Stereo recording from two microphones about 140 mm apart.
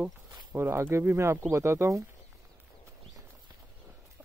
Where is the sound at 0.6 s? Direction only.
15° right (ahead or behind).